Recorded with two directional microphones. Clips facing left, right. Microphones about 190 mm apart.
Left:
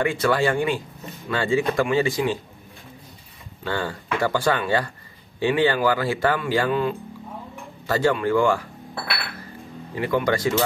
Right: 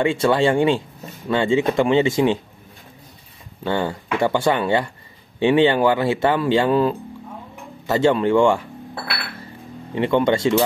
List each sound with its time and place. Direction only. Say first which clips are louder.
0.0 s speech: right 4 dB; 25° right (ahead or behind)
3.6 s speech: right 5 dB; 20° right (ahead or behind)
6.7 s speech: right 5 dB; 35° right (ahead or behind)
7.8 s speech: right 4 dB; 20° right (ahead or behind)
9.9 s speech: right 4 dB; 25° right (ahead or behind)